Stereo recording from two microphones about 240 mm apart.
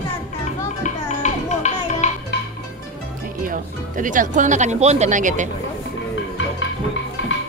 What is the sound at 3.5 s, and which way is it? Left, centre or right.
Speech, right.